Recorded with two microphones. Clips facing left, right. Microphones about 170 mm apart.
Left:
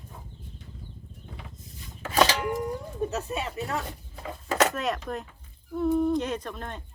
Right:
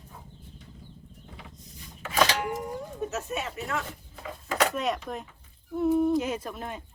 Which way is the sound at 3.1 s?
35° left (ahead or behind).